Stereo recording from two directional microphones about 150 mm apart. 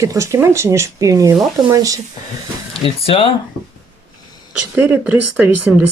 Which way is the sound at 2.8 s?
40° left (ahead or behind).